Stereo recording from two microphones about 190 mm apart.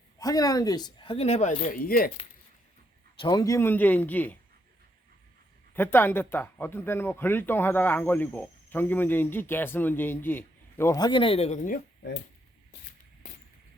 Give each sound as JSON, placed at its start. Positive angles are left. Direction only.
{"t": 0.2, "sound": "speech", "side_deg": 20}
{"t": 3.2, "sound": "speech", "side_deg": 20}
{"t": 5.7, "sound": "speech", "side_deg": 10}